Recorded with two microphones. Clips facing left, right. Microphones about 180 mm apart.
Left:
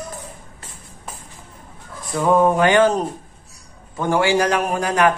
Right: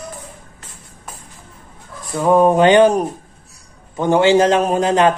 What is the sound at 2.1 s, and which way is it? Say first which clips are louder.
Music: right 3 dB; 15° right (ahead or behind).